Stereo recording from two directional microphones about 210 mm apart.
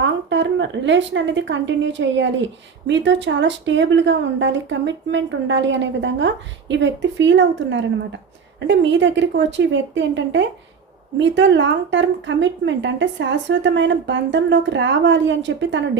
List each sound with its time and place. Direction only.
0.0 s a woman's voice: 60° right (ahead or behind)